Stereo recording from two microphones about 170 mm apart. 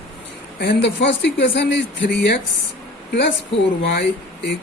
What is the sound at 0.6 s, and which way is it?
Speech, 90° left.